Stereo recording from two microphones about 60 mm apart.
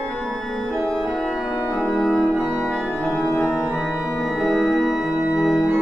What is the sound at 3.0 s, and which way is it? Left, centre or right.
Organ, left.